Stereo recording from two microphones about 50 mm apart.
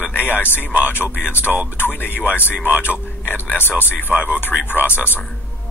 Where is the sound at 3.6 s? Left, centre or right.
Left.